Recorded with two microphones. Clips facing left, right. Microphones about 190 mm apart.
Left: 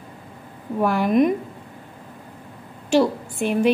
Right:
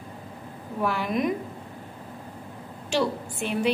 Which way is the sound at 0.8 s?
50° left (ahead or behind).